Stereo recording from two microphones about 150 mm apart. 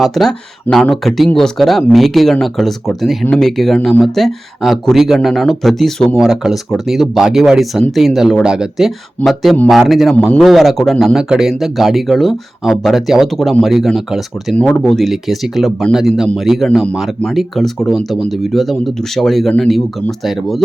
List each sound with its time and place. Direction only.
0.0 s a man's voice: centre (ahead or behind)